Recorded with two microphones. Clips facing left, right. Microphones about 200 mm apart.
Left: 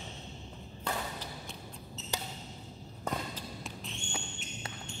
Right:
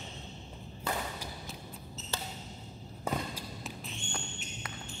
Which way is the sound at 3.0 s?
5° right (ahead or behind).